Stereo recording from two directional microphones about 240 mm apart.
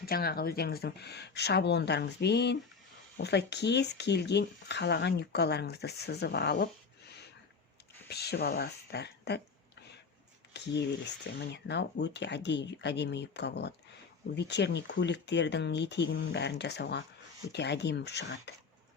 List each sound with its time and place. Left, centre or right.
0.0 s speech: left
8.1 s speech: left
10.5 s speech: left